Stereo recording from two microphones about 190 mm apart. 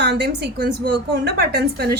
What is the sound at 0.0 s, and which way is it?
A woman's voice, 60° right (ahead or behind).